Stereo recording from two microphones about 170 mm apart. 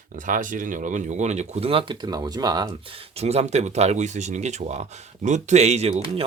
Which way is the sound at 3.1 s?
40° right (ahead or behind).